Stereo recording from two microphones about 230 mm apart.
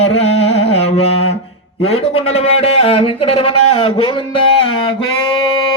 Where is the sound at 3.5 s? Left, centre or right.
Left.